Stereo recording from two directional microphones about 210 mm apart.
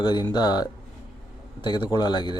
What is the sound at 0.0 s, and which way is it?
Speech, 20° left (ahead or behind).